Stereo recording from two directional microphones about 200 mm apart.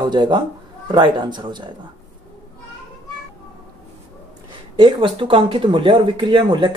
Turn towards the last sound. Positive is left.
turn(degrees=-25)  # may be behind; listen again after turning